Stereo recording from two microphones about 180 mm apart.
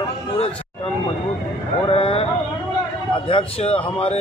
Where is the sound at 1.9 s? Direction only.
30° left (ahead or behind).